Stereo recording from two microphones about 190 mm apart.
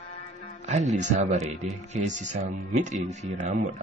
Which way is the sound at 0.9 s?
35° right (ahead or behind).